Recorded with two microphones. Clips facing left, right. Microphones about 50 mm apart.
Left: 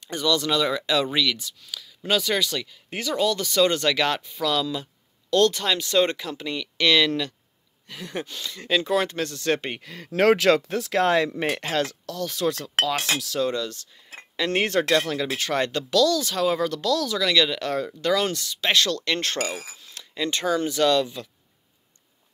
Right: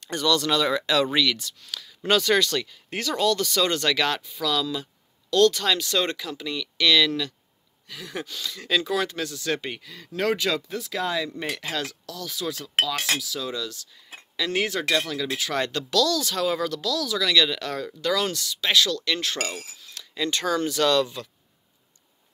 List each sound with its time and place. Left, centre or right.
0.0 s speech: centre; by 7.3 s left
7.9 s speech: left
8.8 s speech: left
9.8 s speech: left
11.3 s speech: left
17.2 s speech: centre; by 19.3 s left
19.8 s speech: left